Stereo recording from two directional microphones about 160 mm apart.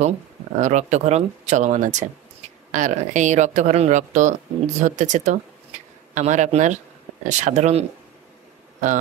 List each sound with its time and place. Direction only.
0.6 s speech: 50° right (ahead or behind)